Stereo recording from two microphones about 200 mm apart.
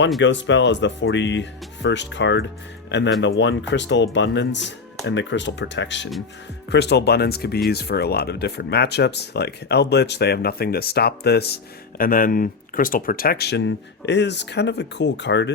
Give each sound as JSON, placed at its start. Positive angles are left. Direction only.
{"t": 0.2, "sound": "speech", "side_deg": 65}